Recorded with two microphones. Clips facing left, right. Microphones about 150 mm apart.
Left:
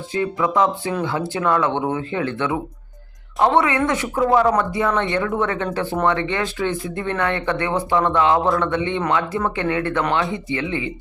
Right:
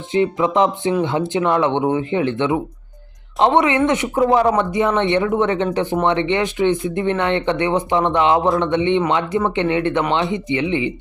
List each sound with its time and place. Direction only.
0.1 s speech: 20° right (ahead or behind)